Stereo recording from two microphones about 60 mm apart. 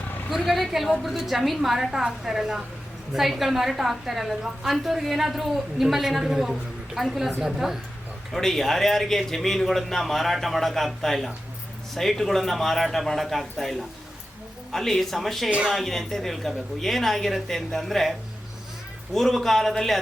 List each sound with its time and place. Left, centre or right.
0.3 s a woman's voice: centre
8.3 s a woman's voice: centre